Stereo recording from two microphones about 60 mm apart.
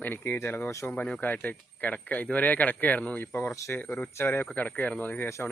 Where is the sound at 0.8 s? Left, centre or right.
Left.